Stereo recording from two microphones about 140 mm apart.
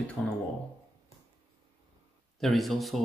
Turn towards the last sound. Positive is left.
turn(degrees=0)  # may be behind; listen again after turning